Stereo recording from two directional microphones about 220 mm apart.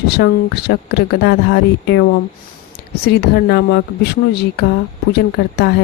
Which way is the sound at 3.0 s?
45° left (ahead or behind).